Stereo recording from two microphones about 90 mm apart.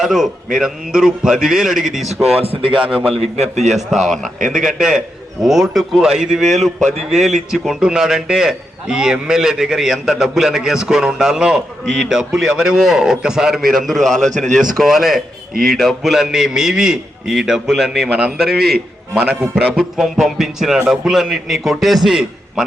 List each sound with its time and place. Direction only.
0.0 s a man's voice: 5° right (ahead or behind)
2.4 s speech: 90° right; by 2.9 s 75° right (ahead or behind)
3.7 s a man's voice: centre (ahead or behind)